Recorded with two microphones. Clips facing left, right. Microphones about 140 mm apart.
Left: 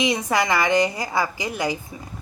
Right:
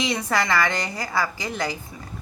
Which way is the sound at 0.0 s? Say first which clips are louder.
Left 3 dB; 15° left (ahead or behind).